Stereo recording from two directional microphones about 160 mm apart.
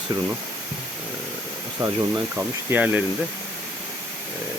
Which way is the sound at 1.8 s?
20° right (ahead or behind).